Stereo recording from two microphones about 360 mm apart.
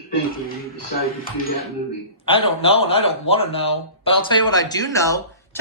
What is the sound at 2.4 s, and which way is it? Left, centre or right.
Speech, centre.